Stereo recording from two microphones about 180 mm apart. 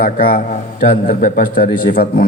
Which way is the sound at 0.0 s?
55° left (ahead or behind).